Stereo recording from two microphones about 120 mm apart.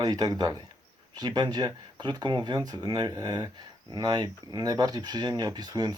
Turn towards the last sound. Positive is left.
turn(degrees=-35)  # may be behind; listen again after turning